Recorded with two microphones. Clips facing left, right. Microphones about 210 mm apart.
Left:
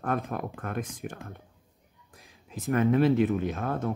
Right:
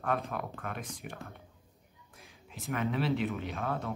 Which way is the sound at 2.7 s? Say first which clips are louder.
Left 9 dB; 50° left (ahead or behind).